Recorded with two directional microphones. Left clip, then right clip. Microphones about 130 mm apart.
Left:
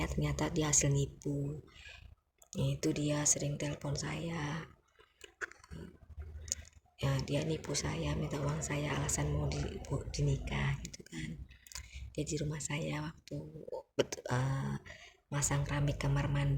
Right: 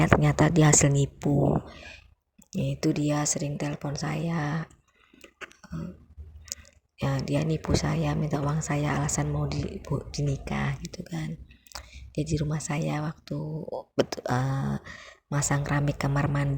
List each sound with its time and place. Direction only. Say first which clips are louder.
0.0 s speech: right 14 dB; 60° right (ahead or behind); by 4.7 s 40° right (ahead or behind)
7.0 s speech: right 7 dB; 45° right (ahead or behind)